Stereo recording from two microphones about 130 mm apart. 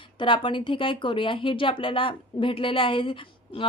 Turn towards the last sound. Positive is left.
turn(degrees=40)  # may be behind; listen again after turning